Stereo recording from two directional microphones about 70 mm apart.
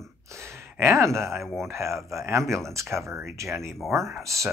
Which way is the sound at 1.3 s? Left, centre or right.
Centre.